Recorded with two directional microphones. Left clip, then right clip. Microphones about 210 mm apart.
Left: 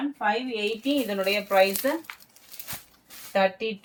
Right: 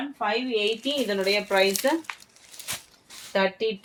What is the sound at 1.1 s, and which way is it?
Speech, 50° right (ahead or behind).